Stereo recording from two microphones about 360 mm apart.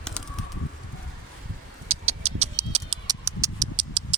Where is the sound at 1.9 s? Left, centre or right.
Right.